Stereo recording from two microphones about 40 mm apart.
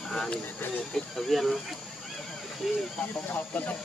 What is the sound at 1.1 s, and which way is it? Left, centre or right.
Speech, centre.